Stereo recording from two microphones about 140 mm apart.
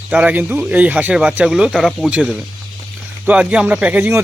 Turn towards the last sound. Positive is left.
turn(degrees=-10)  # may be behind; listen again after turning